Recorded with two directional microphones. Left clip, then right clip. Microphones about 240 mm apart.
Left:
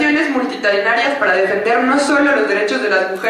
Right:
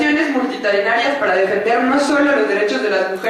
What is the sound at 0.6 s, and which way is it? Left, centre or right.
Speech, centre.